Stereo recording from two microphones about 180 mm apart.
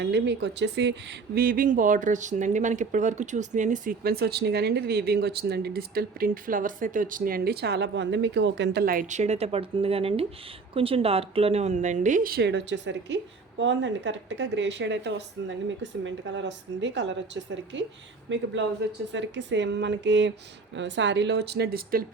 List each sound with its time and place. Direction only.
0.0 s speech: 70° right (ahead or behind)
1.4 s speech: 50° right (ahead or behind); by 18.4 s 90° right
19.1 s speech: 80° right; by 22.0 s 60° right (ahead or behind)